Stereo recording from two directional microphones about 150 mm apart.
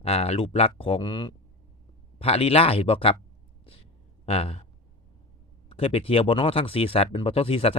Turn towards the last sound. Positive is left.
turn(degrees=40)  # may be behind; listen again after turning